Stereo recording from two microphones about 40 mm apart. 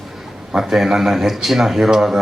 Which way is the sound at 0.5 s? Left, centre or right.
Centre.